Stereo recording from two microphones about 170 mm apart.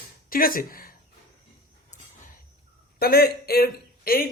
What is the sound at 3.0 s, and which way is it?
A man's voice, 65° left (ahead or behind).